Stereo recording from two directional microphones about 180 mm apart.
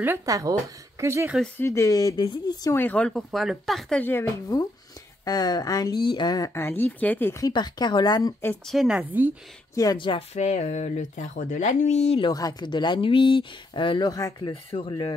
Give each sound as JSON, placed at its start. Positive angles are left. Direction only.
{"t": 0.0, "sound": "speech", "side_deg": -15}
{"t": 1.6, "sound": "speech", "side_deg": 15}
{"t": 8.6, "sound": "a woman's voice", "side_deg": -5}
{"t": 9.8, "sound": "speech", "side_deg": 25}
{"t": 12.3, "sound": "speech", "side_deg": 20}
{"t": 14.5, "sound": "speech", "side_deg": 30}